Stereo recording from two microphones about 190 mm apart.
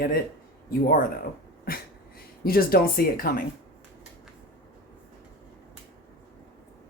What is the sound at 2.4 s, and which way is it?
Speech, 50° left (ahead or behind).